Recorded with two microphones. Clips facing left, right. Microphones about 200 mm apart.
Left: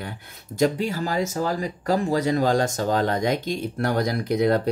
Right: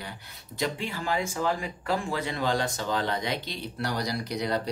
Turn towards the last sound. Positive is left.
turn(degrees=50)  # may be behind; listen again after turning